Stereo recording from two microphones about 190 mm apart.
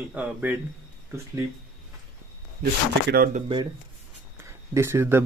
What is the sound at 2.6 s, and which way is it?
Speech, 55° right (ahead or behind).